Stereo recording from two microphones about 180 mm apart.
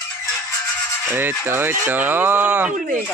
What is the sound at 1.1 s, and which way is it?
A man's voice, 10° right (ahead or behind).